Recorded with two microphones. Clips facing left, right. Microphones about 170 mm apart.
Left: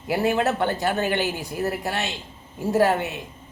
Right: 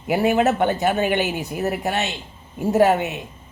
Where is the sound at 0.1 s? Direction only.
15° right (ahead or behind).